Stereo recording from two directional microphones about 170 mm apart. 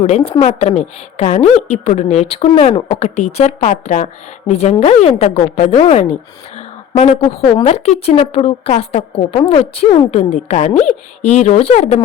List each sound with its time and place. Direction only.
0.3 s a woman's voice: 35° left (ahead or behind)